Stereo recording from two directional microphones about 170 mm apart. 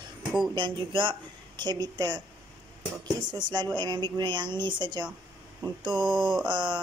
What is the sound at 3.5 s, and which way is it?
Speech, 25° right (ahead or behind).